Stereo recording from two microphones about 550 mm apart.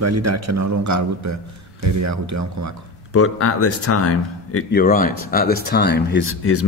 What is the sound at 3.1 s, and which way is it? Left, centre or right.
Speech, left.